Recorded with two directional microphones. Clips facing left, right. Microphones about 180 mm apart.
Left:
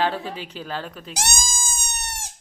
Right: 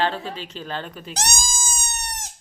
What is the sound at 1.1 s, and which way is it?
Bleat, centre (ahead or behind).